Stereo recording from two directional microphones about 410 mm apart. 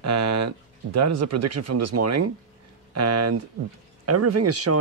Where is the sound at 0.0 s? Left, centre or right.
Right.